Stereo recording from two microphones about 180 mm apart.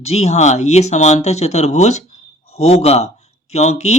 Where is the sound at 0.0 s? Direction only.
35° left (ahead or behind).